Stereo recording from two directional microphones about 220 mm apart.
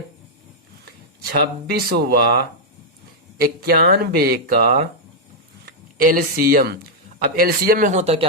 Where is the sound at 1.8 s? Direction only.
45° right (ahead or behind).